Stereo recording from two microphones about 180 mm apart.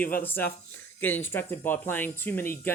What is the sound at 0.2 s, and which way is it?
Speech, 10° left (ahead or behind).